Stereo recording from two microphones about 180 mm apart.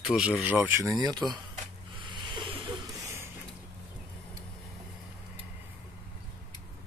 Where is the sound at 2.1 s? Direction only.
25° right (ahead or behind).